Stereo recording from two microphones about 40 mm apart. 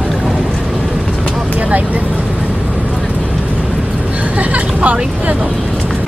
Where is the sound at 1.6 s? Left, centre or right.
Right.